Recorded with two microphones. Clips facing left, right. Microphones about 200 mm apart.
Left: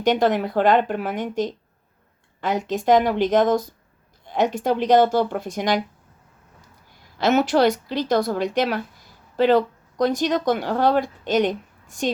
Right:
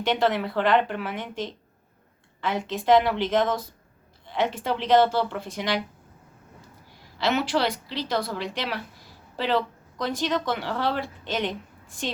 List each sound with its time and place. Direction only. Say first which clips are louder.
0.0 s speech: left 5 dB; 45° left (ahead or behind)
7.2 s speech: left 6 dB; 45° left (ahead or behind)